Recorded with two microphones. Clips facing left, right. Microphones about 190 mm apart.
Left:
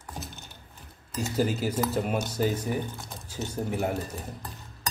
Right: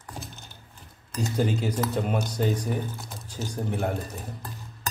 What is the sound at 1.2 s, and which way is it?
Speech, 5° left (ahead or behind).